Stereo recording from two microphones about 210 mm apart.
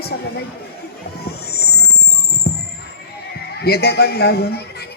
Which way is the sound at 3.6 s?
50° left (ahead or behind).